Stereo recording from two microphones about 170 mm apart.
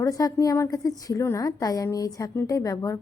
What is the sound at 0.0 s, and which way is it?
A woman's voice, 20° left (ahead or behind).